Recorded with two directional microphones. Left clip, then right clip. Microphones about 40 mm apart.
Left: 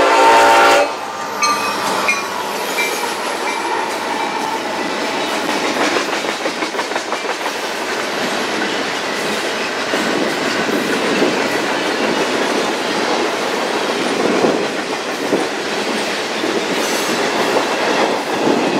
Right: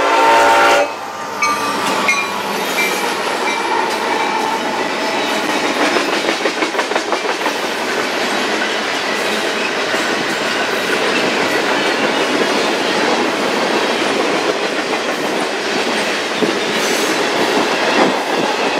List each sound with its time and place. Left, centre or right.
0.0 s train: left